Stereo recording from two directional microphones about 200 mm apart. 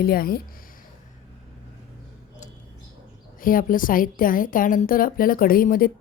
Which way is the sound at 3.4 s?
45° left (ahead or behind).